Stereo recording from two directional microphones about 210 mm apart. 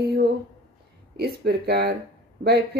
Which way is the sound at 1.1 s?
50° right (ahead or behind).